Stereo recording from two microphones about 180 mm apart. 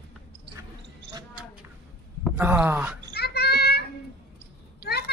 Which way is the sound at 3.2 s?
65° left (ahead or behind).